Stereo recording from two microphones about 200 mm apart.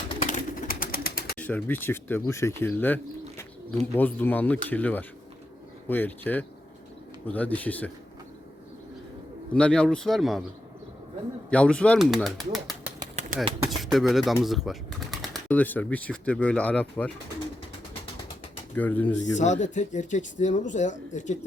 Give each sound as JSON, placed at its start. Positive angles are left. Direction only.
{"t": 0.2, "sound": "bird", "side_deg": 40}
{"t": 1.4, "sound": "speech", "side_deg": 10}
{"t": 9.5, "sound": "speech", "side_deg": 5}
{"t": 11.5, "sound": "speech", "side_deg": 5}
{"t": 18.8, "sound": "speech", "side_deg": 10}
{"t": 19.4, "sound": "speech", "side_deg": 35}